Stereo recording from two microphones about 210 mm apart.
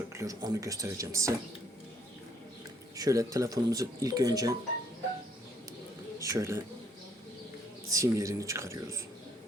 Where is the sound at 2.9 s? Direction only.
15° right (ahead or behind).